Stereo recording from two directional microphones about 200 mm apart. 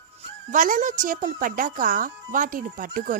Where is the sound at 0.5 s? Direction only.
40° right (ahead or behind).